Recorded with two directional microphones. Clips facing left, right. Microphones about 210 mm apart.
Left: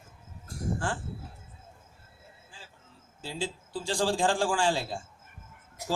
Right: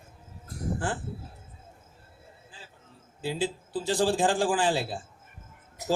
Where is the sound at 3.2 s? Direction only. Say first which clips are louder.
Right 5 dB; 15° right (ahead or behind).